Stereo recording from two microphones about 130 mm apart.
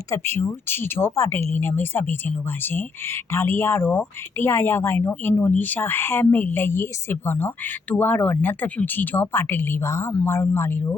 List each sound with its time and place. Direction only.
0.1 s speech: 20° left (ahead or behind)